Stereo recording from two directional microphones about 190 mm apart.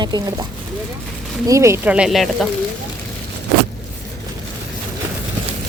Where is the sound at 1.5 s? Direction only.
15° right (ahead or behind).